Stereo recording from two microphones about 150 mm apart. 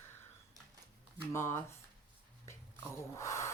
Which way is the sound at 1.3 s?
20° left (ahead or behind).